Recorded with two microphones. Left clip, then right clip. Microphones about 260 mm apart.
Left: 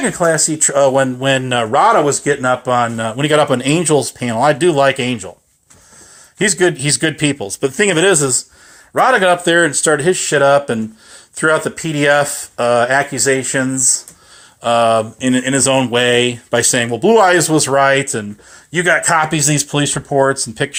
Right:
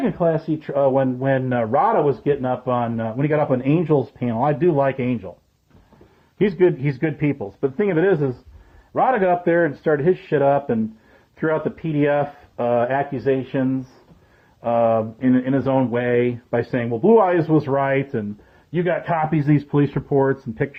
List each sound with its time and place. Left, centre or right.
0.3 s speech: centre
6.4 s speech: centre
7.2 s speech: left
7.9 s a sound: centre
9.0 s speech: centre
14.6 s a sound: left
18.7 s speech: centre